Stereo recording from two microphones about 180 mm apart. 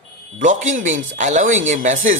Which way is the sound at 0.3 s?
45° right (ahead or behind).